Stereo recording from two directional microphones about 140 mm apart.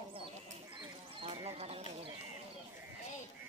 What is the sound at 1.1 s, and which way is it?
Speech, 45° right (ahead or behind).